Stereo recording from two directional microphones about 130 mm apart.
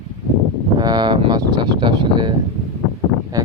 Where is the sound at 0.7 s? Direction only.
35° right (ahead or behind).